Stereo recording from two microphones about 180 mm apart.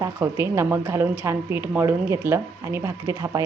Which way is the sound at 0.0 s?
15° right (ahead or behind).